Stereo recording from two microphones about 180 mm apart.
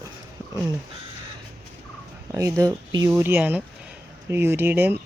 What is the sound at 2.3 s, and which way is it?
Speech, 20° right (ahead or behind).